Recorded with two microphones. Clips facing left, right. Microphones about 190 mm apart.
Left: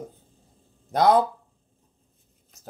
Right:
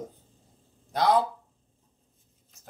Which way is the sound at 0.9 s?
50° left (ahead or behind).